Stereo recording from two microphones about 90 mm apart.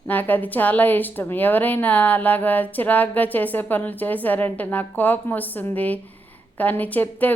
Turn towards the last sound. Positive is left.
turn(degrees=20)  # may be behind; listen again after turning